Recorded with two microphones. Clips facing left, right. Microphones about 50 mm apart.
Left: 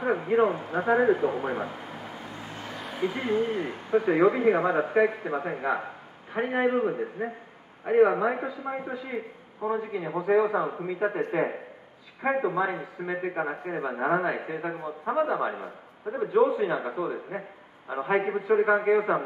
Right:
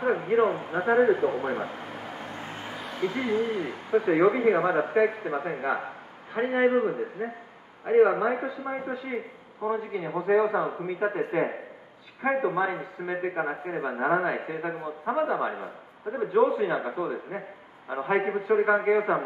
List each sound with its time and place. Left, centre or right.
0.4 s speech: right
0.7 s a man's voice: centre
2.0 s vehicle: right
2.7 s a sound: centre
3.0 s speech: centre
3.4 s speech: left
3.9 s a man's voice: centre
4.3 s speech: centre
5.0 s a man's voice: centre
12.2 s a man's voice: centre